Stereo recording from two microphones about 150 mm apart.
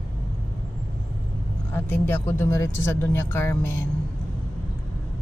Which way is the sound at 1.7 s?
15° left (ahead or behind).